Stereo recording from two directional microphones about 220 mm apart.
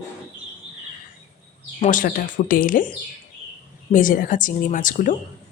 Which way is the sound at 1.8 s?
35° left (ahead or behind).